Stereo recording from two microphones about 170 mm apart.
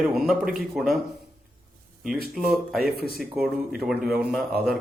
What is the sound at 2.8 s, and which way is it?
Speech, 65° right (ahead or behind).